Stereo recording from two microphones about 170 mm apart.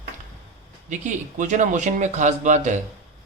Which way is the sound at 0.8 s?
45° right (ahead or behind).